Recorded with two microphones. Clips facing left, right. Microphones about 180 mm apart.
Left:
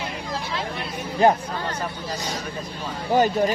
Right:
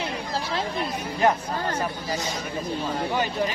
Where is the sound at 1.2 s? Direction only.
35° left (ahead or behind).